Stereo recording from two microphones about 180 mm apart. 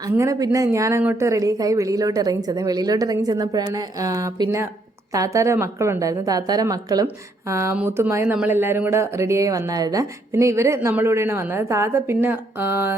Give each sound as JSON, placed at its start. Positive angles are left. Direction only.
{"t": 0.0, "sound": "a woman's voice", "side_deg": -15}